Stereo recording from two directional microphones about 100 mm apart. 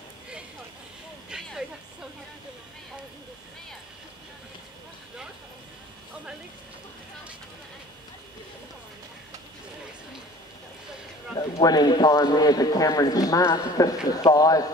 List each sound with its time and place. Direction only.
1.3 s vehicle: 5° right (ahead or behind)
11.6 s speech: 40° left (ahead or behind)